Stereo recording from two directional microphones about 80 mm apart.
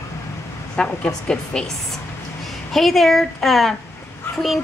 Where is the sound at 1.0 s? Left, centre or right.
Centre.